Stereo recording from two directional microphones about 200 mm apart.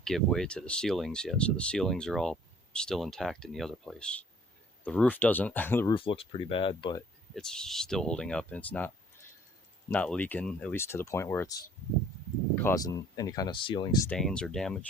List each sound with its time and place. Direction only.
0.0 s speech: centre (ahead or behind)
5.9 s speech: 25° left (ahead or behind)
7.3 s speech: 5° left (ahead or behind)
9.9 s speech: 5° left (ahead or behind); by 14.0 s 20° left (ahead or behind)
14.1 s speech: 5° left (ahead or behind)